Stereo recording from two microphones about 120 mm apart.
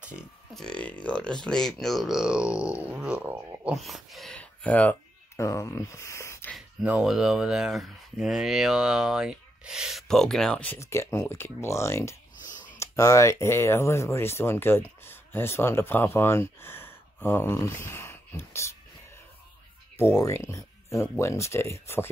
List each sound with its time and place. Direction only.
0.6 s speech: 10° left (ahead or behind); by 3.7 s 15° right (ahead or behind)
3.7 s speech: centre (ahead or behind)
4.4 s speech: 10° left (ahead or behind)
5.3 s speech: 25° left (ahead or behind)
6.8 s speech: 5° right (ahead or behind); by 10.8 s 10° left (ahead or behind)
10.8 s speech: 25° left (ahead or behind)
12.4 s a sound: 90° left
12.7 s speech: 25° left (ahead or behind)
17.8 s a sound: 20° left (ahead or behind)
20.0 s speech: 20° left (ahead or behind)